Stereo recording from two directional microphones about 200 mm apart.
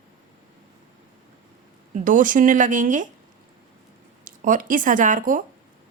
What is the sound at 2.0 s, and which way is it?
Speech, 40° right (ahead or behind).